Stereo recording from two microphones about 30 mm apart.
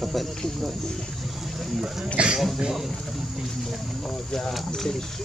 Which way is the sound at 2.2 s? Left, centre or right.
Right.